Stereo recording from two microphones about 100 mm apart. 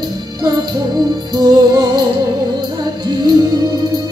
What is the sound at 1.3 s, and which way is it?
Music, 45° right (ahead or behind).